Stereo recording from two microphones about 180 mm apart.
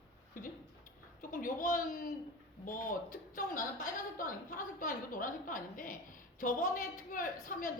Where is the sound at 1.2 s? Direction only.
50° left (ahead or behind).